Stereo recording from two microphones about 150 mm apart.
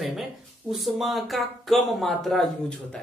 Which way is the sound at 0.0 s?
Centre (ahead or behind).